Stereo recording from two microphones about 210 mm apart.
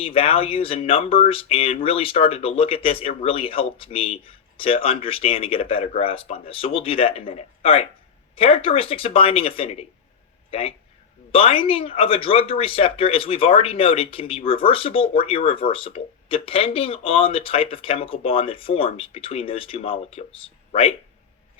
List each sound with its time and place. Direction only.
0.0 s speech: 25° left (ahead or behind)